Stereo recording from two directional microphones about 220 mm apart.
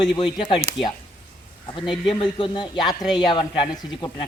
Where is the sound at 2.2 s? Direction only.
20° left (ahead or behind).